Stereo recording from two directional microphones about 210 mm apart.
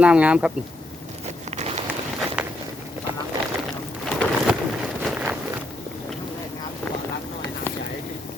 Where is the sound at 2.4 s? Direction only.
5° right (ahead or behind).